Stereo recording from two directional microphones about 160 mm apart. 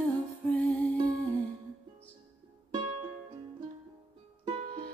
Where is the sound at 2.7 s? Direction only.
30° right (ahead or behind).